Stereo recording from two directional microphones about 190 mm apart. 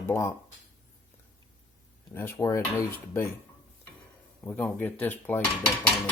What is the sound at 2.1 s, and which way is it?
Speech, 15° left (ahead or behind).